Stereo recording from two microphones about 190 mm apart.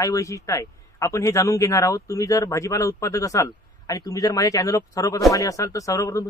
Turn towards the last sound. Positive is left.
turn(degrees=15)  # may be behind; listen again after turning